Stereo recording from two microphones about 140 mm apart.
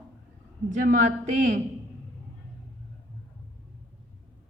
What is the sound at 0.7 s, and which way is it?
Speech, 65° right (ahead or behind).